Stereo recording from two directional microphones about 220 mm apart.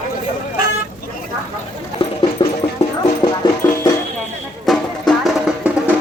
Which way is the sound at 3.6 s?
10° left (ahead or behind).